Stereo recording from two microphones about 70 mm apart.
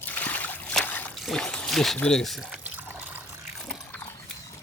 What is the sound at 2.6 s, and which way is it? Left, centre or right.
Water, right.